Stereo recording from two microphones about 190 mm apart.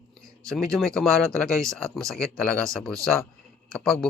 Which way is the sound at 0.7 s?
Centre (ahead or behind).